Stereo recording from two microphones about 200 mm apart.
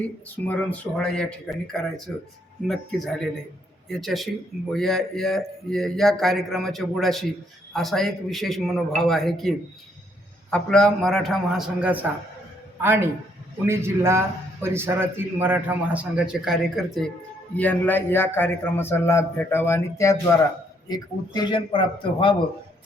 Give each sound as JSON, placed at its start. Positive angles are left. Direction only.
{"t": 0.3, "sound": "a man's voice", "side_deg": 10}